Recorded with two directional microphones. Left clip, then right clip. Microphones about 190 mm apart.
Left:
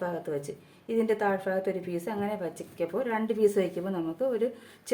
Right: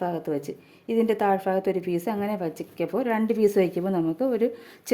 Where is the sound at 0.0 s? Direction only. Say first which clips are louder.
Right 4 dB; 40° right (ahead or behind).